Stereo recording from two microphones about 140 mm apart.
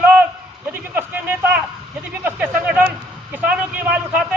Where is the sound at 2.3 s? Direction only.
10° right (ahead or behind).